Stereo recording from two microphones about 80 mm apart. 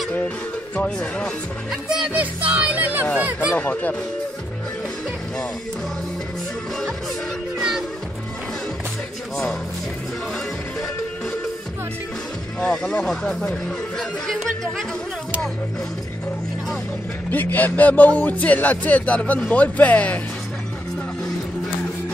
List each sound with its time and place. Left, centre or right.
0.7 s speech: centre
1.7 s speech: centre
2.1 s speech: centre
3.5 s speech: centre
7.5 s music: centre
12.5 s speech: centre
17.3 s speech: left